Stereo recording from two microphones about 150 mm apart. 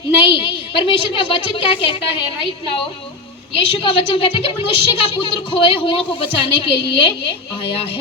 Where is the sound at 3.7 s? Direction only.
35° left (ahead or behind).